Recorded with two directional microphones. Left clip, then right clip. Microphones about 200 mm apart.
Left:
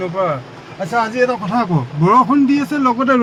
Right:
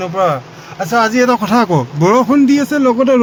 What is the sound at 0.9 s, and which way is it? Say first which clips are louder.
A man's voice: right 4 dB; 35° right (ahead or behind).